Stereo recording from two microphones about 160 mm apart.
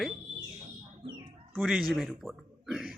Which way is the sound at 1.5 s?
Centre (ahead or behind).